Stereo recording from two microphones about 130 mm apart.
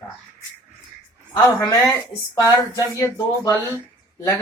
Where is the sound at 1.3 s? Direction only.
25° left (ahead or behind).